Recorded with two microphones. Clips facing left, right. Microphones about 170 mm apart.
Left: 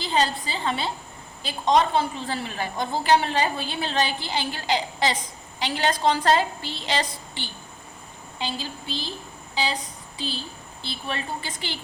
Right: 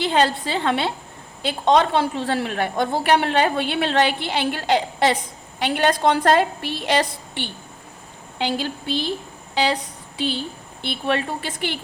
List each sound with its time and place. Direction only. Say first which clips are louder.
0.0 s a woman's voice: right 5 dB; 70° right (ahead or behind)
8.4 s a woman's voice: right 7 dB; 70° right (ahead or behind)
9.6 s a sound: right 6 dB; 70° right (ahead or behind)
10.8 s a woman's voice: right 8 dB; 70° right (ahead or behind)